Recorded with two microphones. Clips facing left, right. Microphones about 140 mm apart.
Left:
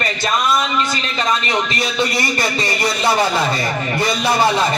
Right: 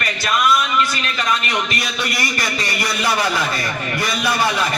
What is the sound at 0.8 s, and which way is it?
A man's voice, 30° left (ahead or behind).